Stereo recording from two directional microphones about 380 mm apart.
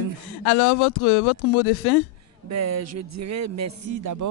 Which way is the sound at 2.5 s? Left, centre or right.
Right.